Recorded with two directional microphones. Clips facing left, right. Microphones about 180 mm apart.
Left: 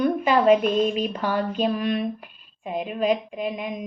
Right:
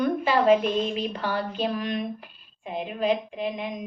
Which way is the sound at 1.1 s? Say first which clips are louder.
Left 4 dB; 15° left (ahead or behind).